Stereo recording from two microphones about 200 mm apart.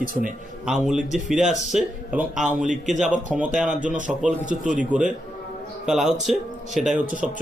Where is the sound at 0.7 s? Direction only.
Centre (ahead or behind).